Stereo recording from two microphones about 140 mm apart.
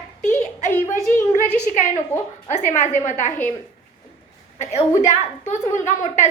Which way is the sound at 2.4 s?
60° left (ahead or behind).